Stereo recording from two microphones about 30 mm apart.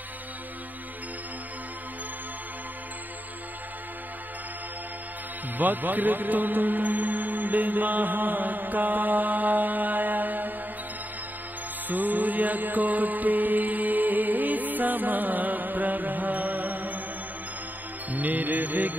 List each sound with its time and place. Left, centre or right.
5.6 s a man's voice: right
11.9 s music: right
18.1 s music: right